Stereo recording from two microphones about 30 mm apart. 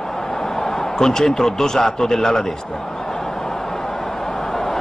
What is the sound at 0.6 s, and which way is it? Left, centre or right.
A man's voice, centre.